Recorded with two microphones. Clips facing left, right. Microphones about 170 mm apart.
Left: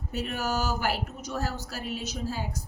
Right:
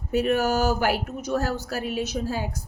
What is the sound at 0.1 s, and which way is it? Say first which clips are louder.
Speech: right 9 dB; 60° right (ahead or behind).